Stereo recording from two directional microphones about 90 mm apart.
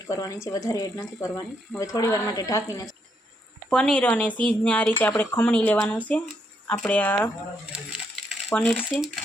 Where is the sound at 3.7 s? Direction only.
10° left (ahead or behind).